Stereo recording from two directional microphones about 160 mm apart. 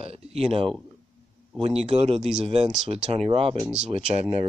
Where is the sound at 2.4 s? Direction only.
40° right (ahead or behind).